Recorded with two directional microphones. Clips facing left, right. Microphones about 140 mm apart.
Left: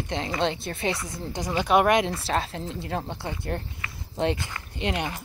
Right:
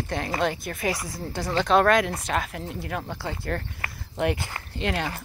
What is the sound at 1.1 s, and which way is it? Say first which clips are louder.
Speech: right 1 dB; 15° left (ahead or behind).